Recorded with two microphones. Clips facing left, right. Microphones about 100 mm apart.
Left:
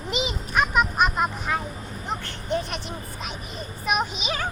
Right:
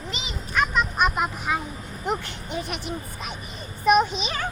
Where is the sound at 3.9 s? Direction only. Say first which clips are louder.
Right 6 dB; 5° left (ahead or behind).